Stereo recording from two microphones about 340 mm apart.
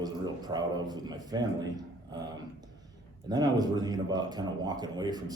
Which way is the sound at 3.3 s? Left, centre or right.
Centre.